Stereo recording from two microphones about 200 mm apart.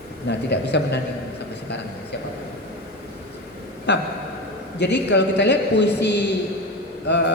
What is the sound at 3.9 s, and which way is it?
A man's voice, 60° left (ahead or behind).